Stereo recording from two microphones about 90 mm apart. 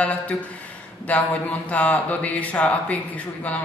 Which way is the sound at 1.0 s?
15° left (ahead or behind).